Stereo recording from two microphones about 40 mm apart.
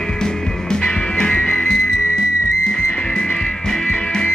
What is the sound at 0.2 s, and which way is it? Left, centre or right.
Music, centre.